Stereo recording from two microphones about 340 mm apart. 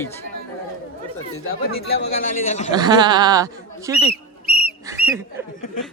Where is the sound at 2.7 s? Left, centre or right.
Centre.